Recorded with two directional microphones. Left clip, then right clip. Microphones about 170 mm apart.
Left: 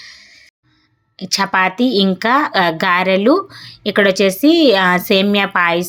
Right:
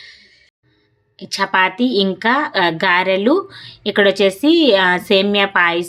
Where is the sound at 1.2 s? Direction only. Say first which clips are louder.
Left 1 dB; 20° left (ahead or behind).